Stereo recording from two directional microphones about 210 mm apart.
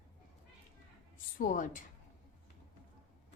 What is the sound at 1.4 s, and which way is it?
Speech, 40° left (ahead or behind).